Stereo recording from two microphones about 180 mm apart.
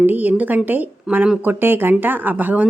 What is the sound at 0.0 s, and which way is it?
Speech, 10° right (ahead or behind).